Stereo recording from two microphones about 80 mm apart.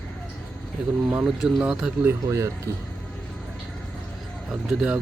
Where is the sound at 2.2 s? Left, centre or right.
Right.